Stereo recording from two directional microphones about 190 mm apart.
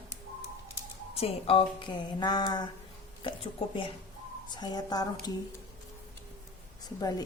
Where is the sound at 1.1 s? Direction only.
30° left (ahead or behind).